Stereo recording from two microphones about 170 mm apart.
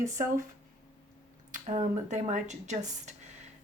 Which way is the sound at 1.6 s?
45° right (ahead or behind).